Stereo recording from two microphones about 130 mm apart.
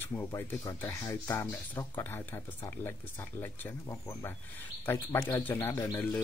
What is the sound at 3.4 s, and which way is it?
Speech, 15° left (ahead or behind).